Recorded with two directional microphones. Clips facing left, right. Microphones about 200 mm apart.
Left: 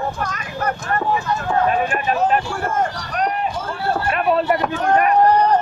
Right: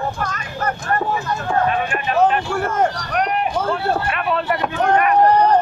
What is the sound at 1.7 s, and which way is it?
Speech, 40° left (ahead or behind).